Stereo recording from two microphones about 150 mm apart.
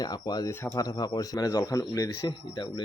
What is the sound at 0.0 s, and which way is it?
Speech, 25° left (ahead or behind).